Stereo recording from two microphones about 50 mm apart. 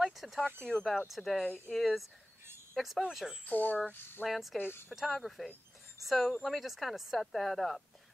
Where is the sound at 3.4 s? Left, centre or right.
Left.